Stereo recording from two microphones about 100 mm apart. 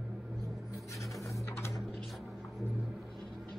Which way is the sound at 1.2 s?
30° left (ahead or behind).